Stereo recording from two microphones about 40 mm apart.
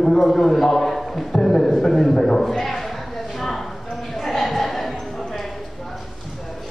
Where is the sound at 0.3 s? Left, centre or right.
Centre.